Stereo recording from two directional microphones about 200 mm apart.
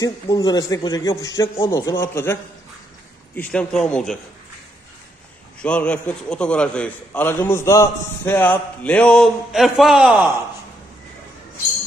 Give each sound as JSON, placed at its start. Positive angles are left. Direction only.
{"t": 0.0, "sound": "speech", "side_deg": 20}
{"t": 3.3, "sound": "a man's voice", "side_deg": 5}
{"t": 5.6, "sound": "a man's voice", "side_deg": 5}